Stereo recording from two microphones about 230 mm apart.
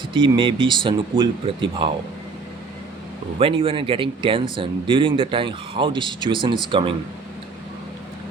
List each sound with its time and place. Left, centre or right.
0.1 s speech: right
3.3 s speech: right